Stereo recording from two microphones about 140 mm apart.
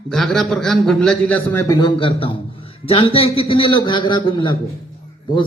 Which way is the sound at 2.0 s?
40° left (ahead or behind).